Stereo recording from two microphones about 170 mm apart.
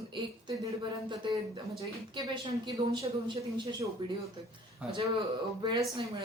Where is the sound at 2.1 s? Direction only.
25° right (ahead or behind).